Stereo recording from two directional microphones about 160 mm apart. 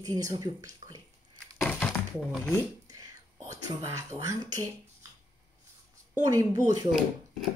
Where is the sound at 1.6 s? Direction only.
5° left (ahead or behind).